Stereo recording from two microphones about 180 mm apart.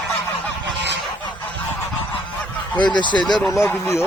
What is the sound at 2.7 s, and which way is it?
Speech, 25° left (ahead or behind).